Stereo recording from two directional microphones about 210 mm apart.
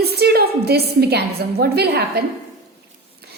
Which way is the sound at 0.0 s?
50° right (ahead or behind).